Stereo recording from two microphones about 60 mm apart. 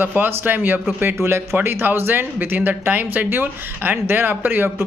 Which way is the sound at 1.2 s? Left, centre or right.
Right.